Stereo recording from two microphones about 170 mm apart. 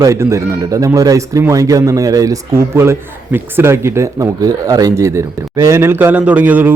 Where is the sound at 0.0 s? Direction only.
15° right (ahead or behind).